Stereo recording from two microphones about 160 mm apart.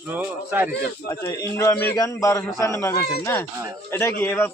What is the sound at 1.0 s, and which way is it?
A man's voice, 20° left (ahead or behind).